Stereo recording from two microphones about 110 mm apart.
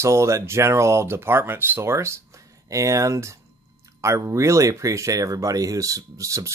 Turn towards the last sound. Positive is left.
turn(degrees=-30)  # may be behind; listen again after turning